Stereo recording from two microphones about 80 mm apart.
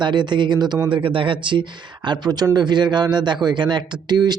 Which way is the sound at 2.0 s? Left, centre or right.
Right.